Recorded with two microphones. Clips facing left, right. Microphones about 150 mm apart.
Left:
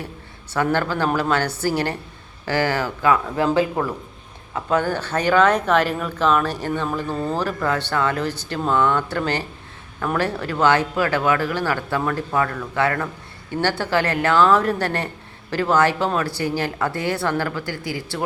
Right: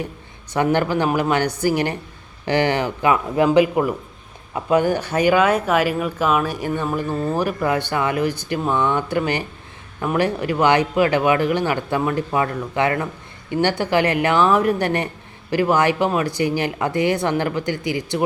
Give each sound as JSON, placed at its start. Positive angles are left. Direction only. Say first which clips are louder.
{"t": 0.5, "sound": "a woman's voice", "louder": "right 3 dB", "side_deg": -15}